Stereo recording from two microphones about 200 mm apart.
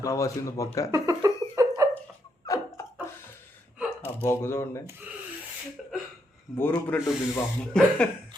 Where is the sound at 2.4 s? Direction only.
15° left (ahead or behind).